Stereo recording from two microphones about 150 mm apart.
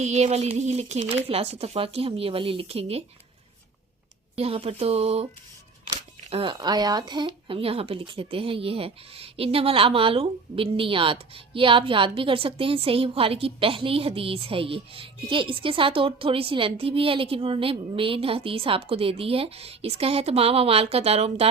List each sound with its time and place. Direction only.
0.0 s speech: 50° right (ahead or behind)
4.4 s speech: 40° right (ahead or behind)
6.3 s speech: 35° right (ahead or behind)